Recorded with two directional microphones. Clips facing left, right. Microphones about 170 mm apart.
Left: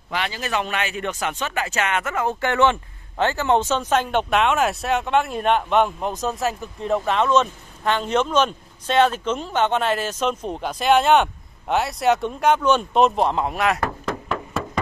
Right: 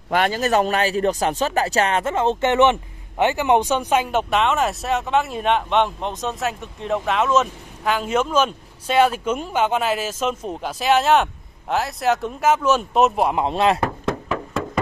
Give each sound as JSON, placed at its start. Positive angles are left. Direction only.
{"t": 0.1, "sound": "speech", "side_deg": -45}
{"t": 13.4, "sound": "speech", "side_deg": -25}